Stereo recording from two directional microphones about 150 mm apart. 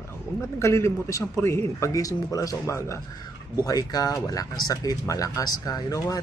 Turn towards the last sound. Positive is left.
turn(degrees=25)  # may be behind; listen again after turning